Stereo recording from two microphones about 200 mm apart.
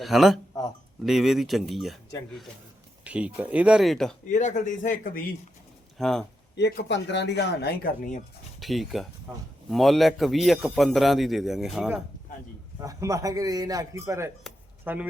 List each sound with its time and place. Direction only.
0.0 s a man's voice: centre (ahead or behind)
3.0 s speech: 5° right (ahead or behind)
4.3 s speech: 40° left (ahead or behind)
6.0 s a man's voice: centre (ahead or behind)
6.6 s speech: 55° left (ahead or behind)
8.6 s a man's voice: centre (ahead or behind)
12.8 s speech: 15° right (ahead or behind)
14.5 s a sound: centre (ahead or behind)
14.9 s speech: 10° right (ahead or behind)